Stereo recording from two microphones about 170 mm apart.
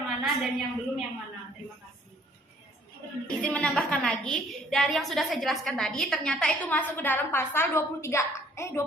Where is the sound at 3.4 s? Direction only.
5° left (ahead or behind).